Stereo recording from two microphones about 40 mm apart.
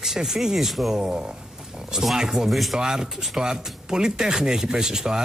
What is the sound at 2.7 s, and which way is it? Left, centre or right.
Speech, centre.